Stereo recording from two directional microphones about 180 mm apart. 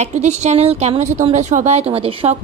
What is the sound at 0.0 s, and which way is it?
A woman's voice, 40° right (ahead or behind).